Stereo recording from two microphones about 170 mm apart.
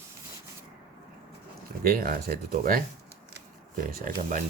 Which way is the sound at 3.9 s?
55° right (ahead or behind).